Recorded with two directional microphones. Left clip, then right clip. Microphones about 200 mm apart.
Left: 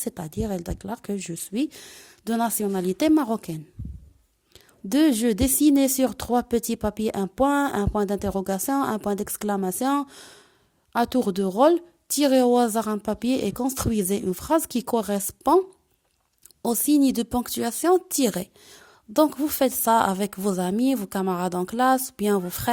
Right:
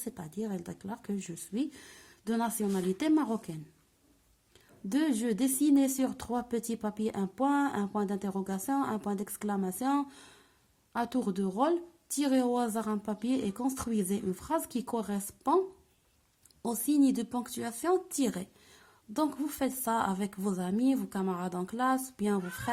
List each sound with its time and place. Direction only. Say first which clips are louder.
0.0 s speech: left 9 dB; 40° left (ahead or behind)
16.6 s speech: left 7 dB; 45° left (ahead or behind)